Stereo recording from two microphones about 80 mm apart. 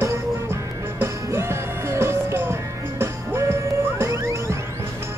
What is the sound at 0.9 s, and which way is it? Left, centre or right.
Music, right.